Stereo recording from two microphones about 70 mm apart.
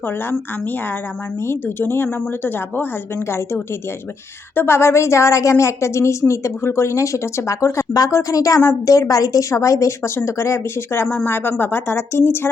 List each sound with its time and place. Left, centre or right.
0.0 s a woman's voice: left